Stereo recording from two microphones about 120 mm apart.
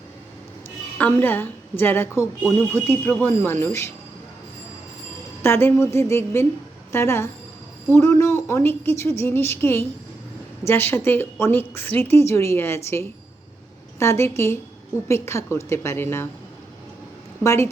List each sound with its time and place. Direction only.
0.9 s a woman's voice: 15° left (ahead or behind)
5.4 s a woman's voice: 20° left (ahead or behind)
17.4 s a woman's voice: 25° left (ahead or behind)